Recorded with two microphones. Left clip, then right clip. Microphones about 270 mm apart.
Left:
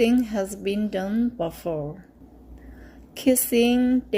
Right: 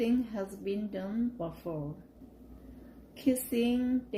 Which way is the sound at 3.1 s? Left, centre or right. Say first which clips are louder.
Left 10 dB; left.